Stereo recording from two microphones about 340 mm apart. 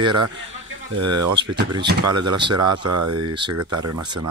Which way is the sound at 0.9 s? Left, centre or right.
Right.